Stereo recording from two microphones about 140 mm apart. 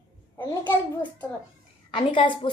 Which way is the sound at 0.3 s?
15° left (ahead or behind).